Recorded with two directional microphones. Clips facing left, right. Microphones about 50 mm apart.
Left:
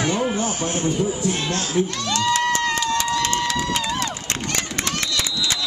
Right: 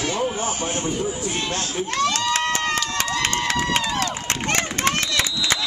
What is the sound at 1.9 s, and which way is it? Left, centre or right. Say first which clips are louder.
Speech: right 2 dB; right.